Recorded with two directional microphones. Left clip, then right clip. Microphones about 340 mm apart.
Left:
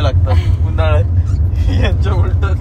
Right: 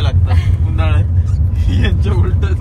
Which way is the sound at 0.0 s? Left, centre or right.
Left.